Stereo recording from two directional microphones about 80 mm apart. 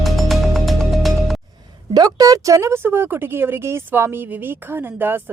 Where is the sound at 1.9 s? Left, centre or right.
Right.